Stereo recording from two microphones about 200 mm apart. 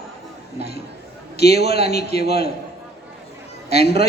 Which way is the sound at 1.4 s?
55° left (ahead or behind).